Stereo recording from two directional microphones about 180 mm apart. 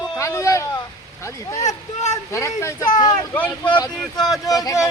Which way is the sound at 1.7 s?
40° left (ahead or behind).